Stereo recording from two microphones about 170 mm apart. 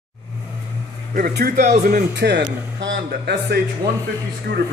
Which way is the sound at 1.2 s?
70° right (ahead or behind).